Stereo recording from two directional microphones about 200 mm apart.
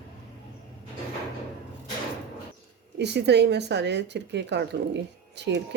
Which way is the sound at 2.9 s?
55° right (ahead or behind).